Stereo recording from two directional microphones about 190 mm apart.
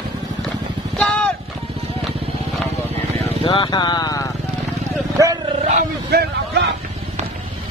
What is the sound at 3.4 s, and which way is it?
Vehicle, 25° left (ahead or behind).